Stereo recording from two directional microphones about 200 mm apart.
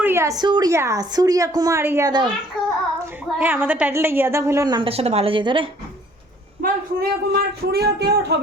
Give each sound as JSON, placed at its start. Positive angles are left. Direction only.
{"t": 0.0, "sound": "a woman's voice", "side_deg": -15}
{"t": 3.3, "sound": "a woman's voice", "side_deg": -10}
{"t": 6.6, "sound": "speech", "side_deg": -50}